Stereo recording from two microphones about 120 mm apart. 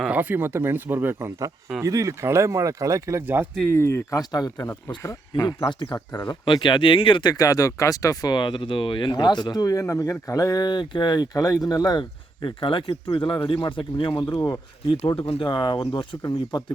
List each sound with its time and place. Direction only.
0.0 s speech: 15° right (ahead or behind)
3.8 s speech: 20° left (ahead or behind); by 14.1 s 45° left (ahead or behind)
14.1 s speech: 30° left (ahead or behind)
14.8 s speech: 50° left (ahead or behind); by 16.7 s 35° left (ahead or behind)